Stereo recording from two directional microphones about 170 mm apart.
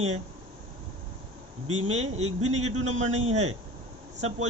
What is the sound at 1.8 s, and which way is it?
Speech, 40° right (ahead or behind).